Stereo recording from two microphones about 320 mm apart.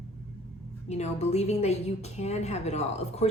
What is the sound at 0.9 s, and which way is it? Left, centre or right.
Speech, left.